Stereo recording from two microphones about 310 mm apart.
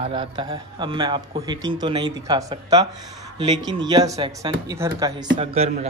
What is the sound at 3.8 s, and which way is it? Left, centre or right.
A man's voice, centre.